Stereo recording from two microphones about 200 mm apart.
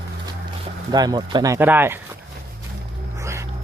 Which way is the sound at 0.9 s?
20° right (ahead or behind).